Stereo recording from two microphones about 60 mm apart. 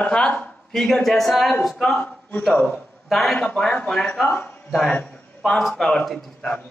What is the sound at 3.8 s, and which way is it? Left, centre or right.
A man's voice, centre.